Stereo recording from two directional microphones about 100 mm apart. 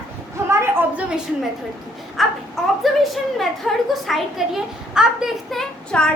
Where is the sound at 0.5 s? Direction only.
25° right (ahead or behind).